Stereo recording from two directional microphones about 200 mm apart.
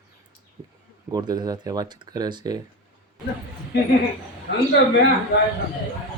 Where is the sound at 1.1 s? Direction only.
20° right (ahead or behind).